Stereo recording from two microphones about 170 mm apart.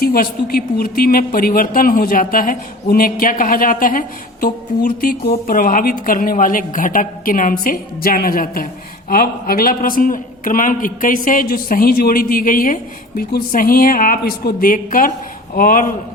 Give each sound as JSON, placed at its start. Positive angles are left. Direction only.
{"t": 0.0, "sound": "a man's voice", "side_deg": 60}